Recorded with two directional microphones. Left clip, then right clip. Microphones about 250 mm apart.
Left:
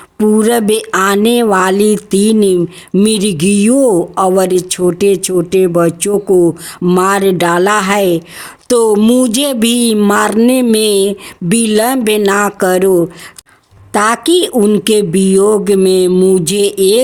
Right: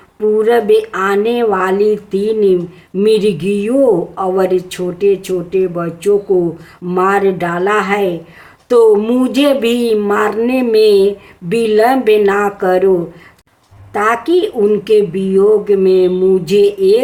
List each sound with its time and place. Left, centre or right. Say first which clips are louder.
0.2 s speech: even; left
13.9 s speech: left 2 dB; left